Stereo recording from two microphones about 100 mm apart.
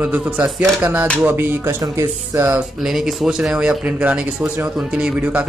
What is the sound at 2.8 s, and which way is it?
Speech, 5° right (ahead or behind).